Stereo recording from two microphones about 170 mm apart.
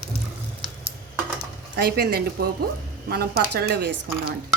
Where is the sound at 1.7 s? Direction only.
70° right (ahead or behind).